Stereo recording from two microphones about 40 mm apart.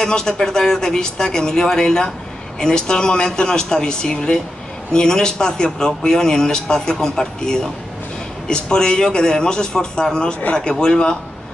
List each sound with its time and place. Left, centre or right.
0.0 s a man's voice: centre